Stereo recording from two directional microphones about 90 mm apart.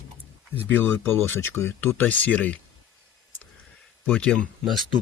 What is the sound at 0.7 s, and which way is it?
Speech, 25° left (ahead or behind).